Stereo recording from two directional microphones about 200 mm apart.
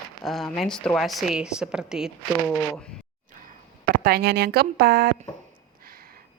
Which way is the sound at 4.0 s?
50° right (ahead or behind).